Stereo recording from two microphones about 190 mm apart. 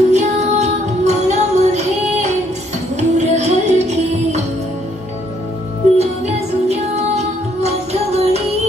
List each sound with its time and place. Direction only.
0.1 s music: 35° right (ahead or behind)
5.9 s music: 35° right (ahead or behind)